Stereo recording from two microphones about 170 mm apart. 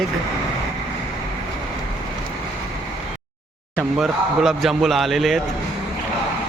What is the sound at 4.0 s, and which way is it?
Speech, centre (ahead or behind).